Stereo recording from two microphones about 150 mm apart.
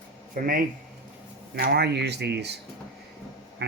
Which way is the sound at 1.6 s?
90° right.